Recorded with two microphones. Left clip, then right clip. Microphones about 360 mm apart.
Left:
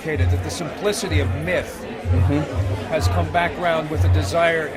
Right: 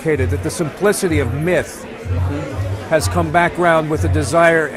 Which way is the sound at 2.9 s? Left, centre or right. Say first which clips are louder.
Right 6 dB; right.